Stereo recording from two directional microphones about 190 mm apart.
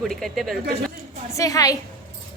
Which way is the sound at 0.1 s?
Centre (ahead or behind).